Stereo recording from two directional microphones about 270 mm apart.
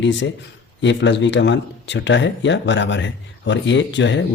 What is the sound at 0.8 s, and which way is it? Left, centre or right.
Speech, left.